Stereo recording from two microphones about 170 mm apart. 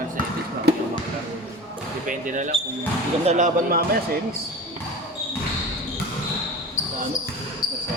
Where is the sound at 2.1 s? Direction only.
50° right (ahead or behind).